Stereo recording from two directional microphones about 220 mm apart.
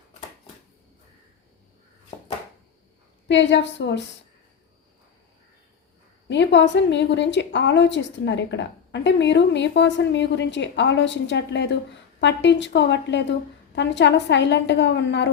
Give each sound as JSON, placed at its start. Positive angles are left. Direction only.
{"t": 3.2, "sound": "a woman's voice", "side_deg": 55}
{"t": 6.2, "sound": "a woman's voice", "side_deg": 55}